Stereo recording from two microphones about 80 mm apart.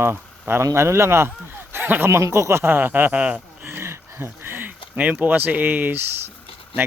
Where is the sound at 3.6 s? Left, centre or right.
Right.